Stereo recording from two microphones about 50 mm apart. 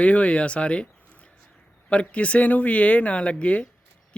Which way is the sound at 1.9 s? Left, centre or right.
Left.